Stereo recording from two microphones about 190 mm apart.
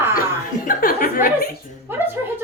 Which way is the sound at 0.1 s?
50° left (ahead or behind).